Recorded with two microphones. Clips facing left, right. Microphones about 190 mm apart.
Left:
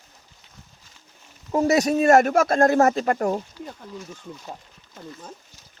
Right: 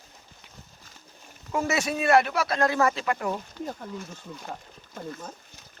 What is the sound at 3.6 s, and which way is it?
Speech, 55° right (ahead or behind).